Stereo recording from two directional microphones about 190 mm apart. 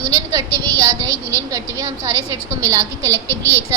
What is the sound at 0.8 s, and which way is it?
A woman's voice, 20° right (ahead or behind).